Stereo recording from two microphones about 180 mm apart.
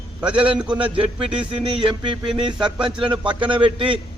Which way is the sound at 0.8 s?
30° right (ahead or behind).